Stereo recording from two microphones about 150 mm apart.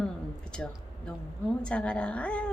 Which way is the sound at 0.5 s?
5° left (ahead or behind).